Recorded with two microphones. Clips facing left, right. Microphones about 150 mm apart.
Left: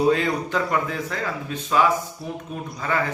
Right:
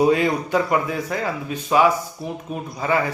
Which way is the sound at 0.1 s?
15° right (ahead or behind).